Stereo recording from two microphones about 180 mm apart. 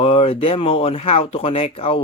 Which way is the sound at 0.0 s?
30° left (ahead or behind).